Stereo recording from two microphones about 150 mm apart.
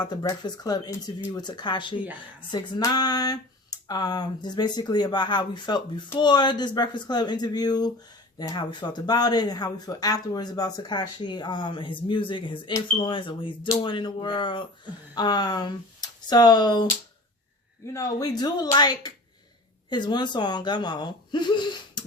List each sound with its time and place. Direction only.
0.0 s speech: 25° left (ahead or behind)
17.9 s speech: 25° left (ahead or behind)